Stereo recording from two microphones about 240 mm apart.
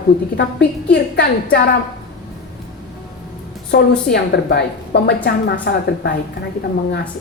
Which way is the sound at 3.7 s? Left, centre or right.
Left.